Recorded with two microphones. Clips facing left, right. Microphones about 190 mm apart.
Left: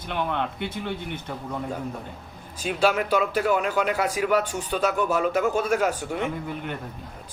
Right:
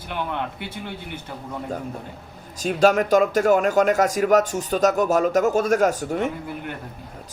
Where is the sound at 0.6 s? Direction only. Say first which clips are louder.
Left 3 dB; 10° right (ahead or behind).